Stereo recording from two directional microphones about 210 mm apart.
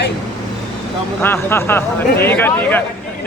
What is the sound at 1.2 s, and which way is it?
A man's voice, 10° left (ahead or behind).